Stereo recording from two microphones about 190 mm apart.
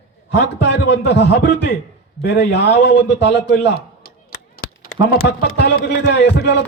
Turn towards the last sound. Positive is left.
turn(degrees=65)  # may be behind; listen again after turning